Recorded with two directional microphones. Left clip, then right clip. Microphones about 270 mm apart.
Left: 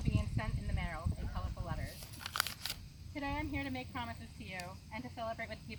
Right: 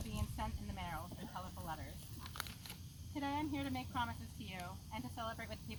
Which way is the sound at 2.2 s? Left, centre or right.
Left.